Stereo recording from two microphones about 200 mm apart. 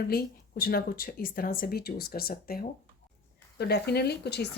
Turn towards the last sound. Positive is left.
turn(degrees=55)  # may be behind; listen again after turning